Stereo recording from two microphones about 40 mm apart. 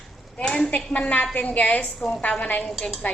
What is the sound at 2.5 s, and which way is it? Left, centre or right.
Speech, left.